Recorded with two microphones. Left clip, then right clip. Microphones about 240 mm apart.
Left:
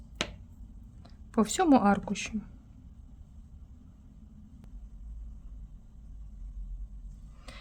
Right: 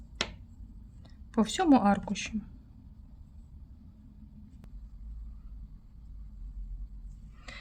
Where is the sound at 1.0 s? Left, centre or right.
Centre.